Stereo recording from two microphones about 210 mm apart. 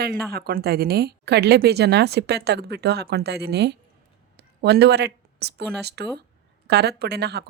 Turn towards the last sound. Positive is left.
turn(degrees=-50)  # may be behind; listen again after turning